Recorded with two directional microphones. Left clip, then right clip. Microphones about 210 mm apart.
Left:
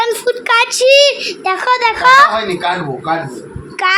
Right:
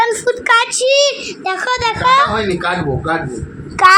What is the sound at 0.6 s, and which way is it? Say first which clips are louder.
A child's voice: left 4 dB; 25° left (ahead or behind).